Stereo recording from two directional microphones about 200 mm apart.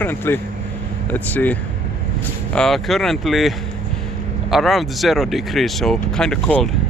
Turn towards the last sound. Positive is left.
turn(degrees=5)  # may be behind; listen again after turning